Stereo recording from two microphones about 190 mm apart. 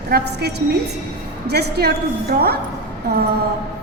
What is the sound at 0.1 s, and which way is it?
A woman's voice, 60° right (ahead or behind).